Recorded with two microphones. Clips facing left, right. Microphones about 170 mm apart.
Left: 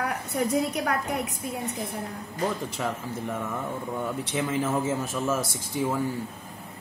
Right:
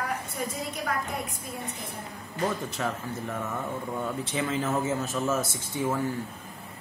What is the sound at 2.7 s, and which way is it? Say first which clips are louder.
Speech: left 1 dB; 10° left (ahead or behind).